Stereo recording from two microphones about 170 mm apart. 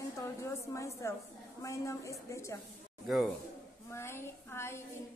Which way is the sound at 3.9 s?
15° left (ahead or behind).